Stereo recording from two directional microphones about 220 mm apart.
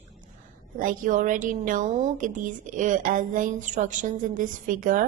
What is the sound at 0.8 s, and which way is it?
A woman's voice, 40° right (ahead or behind).